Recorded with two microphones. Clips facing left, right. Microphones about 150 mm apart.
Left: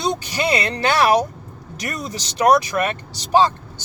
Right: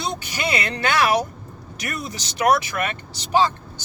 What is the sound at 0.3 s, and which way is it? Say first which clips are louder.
Speech: left 4 dB; 30° left (ahead or behind).